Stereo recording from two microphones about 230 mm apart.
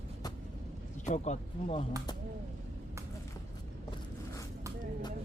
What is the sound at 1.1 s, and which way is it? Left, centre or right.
Speech, left.